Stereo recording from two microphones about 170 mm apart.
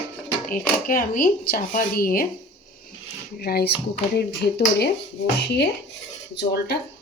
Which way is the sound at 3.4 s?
65° left (ahead or behind).